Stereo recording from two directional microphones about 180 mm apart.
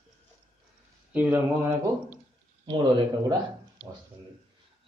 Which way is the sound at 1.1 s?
10° right (ahead or behind).